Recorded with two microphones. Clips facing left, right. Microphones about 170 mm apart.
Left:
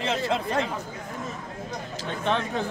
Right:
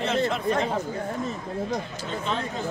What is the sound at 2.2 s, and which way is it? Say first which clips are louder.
Speech: left 5 dB; 65° left (ahead or behind).